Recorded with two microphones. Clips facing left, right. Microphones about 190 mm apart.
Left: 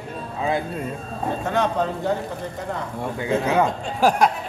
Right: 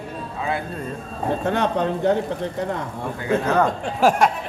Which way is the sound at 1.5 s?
60° right (ahead or behind).